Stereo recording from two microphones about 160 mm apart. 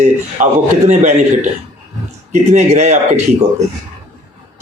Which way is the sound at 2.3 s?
45° right (ahead or behind).